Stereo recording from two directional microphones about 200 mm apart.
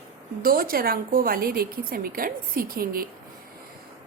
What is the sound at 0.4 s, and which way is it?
A woman's voice, 45° right (ahead or behind).